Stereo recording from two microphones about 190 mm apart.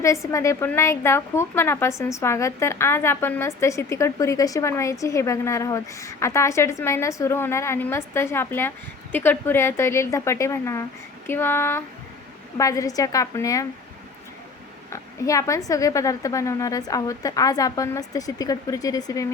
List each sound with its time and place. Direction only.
0.0 s a woman's voice: 15° left (ahead or behind)
14.8 s a woman's voice: 15° left (ahead or behind)